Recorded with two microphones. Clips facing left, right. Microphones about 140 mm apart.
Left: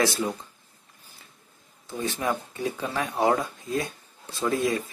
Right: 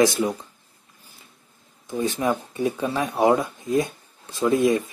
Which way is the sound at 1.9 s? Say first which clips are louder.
Right 5 dB; 15° right (ahead or behind).